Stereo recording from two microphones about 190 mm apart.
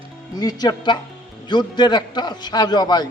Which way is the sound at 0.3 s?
20° left (ahead or behind).